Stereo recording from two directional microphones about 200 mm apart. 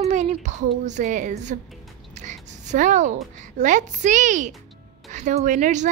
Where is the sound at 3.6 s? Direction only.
40° right (ahead or behind).